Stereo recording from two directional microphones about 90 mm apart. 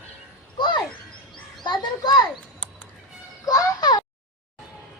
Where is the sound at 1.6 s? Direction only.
55° left (ahead or behind).